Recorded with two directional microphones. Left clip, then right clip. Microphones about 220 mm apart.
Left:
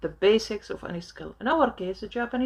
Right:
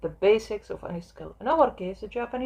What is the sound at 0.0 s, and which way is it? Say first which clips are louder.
A woman's voice: even; 35° left (ahead or behind).